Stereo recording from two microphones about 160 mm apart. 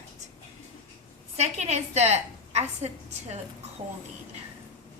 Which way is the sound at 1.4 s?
45° right (ahead or behind).